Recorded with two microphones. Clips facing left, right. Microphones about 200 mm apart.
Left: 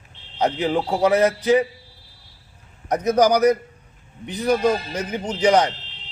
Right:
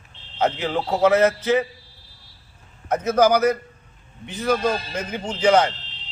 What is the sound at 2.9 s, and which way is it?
A man's voice, 15° left (ahead or behind).